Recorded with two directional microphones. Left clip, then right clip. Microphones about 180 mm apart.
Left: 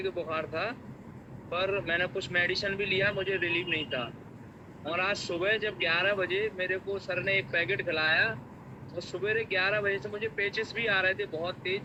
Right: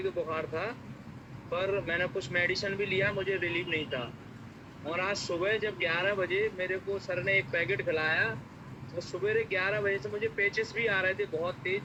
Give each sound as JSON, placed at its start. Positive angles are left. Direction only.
{"t": 0.0, "sound": "speech", "side_deg": 5}